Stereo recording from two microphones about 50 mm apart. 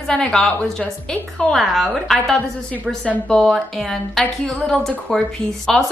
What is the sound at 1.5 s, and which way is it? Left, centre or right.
A woman's voice, centre.